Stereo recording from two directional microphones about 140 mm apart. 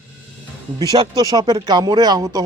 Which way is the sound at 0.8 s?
25° right (ahead or behind).